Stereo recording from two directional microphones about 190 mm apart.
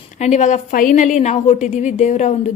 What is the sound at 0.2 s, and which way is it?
A woman's voice, 35° left (ahead or behind).